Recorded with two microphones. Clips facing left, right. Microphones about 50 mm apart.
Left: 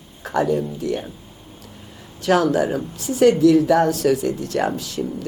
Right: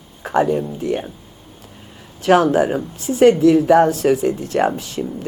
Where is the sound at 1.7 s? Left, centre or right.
Right.